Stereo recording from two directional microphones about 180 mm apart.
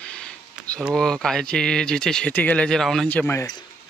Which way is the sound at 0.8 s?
Centre (ahead or behind).